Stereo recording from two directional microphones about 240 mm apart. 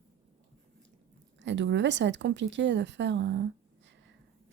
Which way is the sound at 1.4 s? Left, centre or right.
Right.